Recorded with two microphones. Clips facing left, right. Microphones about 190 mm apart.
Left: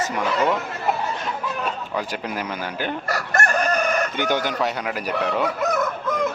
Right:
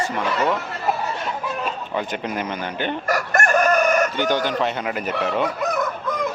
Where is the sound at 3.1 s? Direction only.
45° right (ahead or behind).